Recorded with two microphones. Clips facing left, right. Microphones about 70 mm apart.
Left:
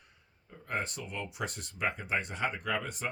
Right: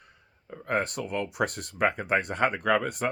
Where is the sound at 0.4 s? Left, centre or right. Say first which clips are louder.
Right 8 dB; right.